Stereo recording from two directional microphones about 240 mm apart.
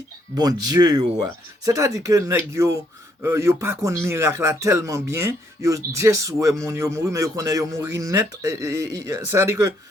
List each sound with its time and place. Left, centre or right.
0.3 s a man's voice: centre